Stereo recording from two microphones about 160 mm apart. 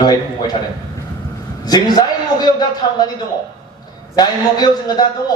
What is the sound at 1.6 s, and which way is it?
A man's voice, 25° left (ahead or behind).